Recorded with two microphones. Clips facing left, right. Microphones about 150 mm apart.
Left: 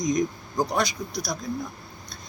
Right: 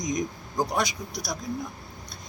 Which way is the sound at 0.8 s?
15° right (ahead or behind).